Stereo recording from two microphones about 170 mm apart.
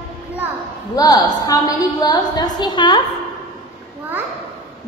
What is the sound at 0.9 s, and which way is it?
A woman's voice, 20° left (ahead or behind).